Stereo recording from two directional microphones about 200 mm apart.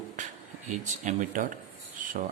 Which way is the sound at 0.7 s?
35° right (ahead or behind).